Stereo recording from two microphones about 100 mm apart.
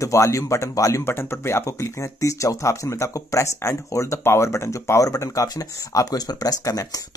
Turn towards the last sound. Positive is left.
turn(degrees=35)  # may be behind; listen again after turning